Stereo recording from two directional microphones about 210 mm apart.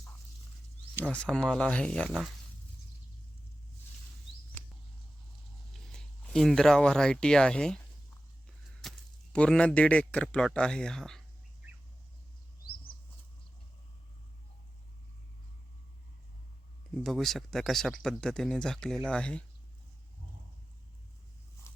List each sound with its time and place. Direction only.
1.1 s speech: 5° left (ahead or behind)
4.6 s mouse: 10° left (ahead or behind)
5.7 s speech: centre (ahead or behind)
8.8 s speech: centre (ahead or behind)
17.0 s speech: centre (ahead or behind)
21.7 s a sound: 15° left (ahead or behind)